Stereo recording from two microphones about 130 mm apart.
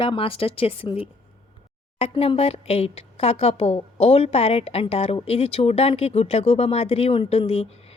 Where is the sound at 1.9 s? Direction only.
50° left (ahead or behind).